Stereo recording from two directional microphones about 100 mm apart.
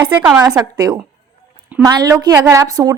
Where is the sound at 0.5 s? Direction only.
40° right (ahead or behind).